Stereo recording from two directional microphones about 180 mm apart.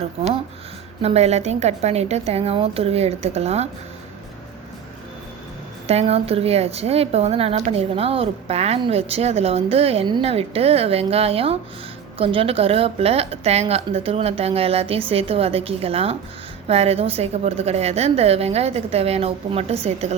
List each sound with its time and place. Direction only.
1.0 s a woman's voice: 35° right (ahead or behind)
5.9 s a woman's voice: 35° right (ahead or behind)